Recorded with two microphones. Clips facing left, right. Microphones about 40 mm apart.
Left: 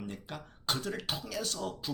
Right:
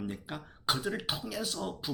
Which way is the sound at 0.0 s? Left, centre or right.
Centre.